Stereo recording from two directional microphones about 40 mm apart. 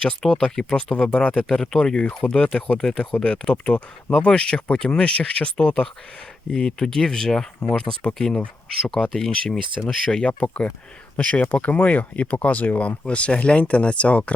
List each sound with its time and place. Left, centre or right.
0.3 s speech: centre; by 14.3 s left